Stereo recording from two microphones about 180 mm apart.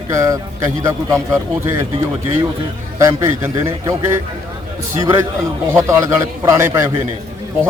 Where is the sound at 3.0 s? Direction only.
15° right (ahead or behind).